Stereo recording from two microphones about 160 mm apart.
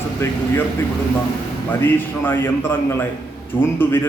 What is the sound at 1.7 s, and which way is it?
A man's voice, 10° left (ahead or behind).